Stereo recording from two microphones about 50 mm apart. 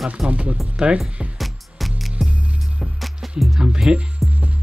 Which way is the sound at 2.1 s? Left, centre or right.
Right.